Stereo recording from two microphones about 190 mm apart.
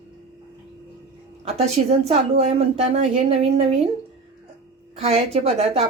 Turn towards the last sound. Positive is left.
turn(degrees=-30)  # may be behind; listen again after turning